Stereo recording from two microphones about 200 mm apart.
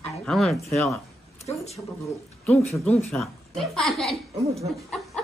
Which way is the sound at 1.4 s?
30° left (ahead or behind).